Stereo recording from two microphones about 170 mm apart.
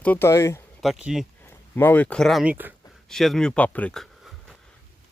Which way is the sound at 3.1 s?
Centre (ahead or behind).